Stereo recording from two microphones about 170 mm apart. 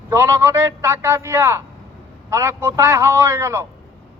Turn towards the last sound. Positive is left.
turn(degrees=-15)  # may be behind; listen again after turning